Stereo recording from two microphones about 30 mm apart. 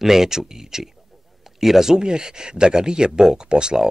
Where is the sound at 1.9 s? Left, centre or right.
Right.